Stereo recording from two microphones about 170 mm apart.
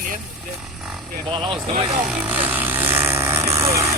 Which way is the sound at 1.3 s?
30° right (ahead or behind).